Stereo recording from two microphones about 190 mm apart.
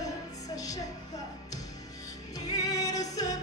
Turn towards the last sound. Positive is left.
turn(degrees=20)  # may be behind; listen again after turning